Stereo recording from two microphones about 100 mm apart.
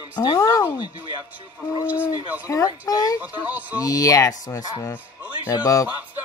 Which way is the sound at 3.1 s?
15° right (ahead or behind).